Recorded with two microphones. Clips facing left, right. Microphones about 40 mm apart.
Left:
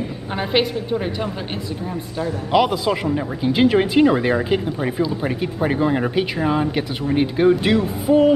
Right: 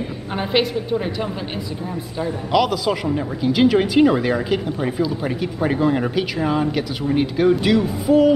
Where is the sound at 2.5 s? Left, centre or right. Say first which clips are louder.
Left 1 dB; centre.